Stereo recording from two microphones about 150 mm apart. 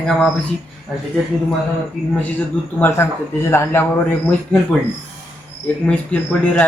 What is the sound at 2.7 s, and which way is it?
A man's voice, 15° left (ahead or behind).